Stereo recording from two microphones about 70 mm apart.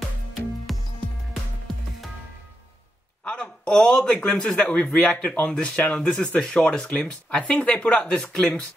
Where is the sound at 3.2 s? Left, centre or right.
Centre.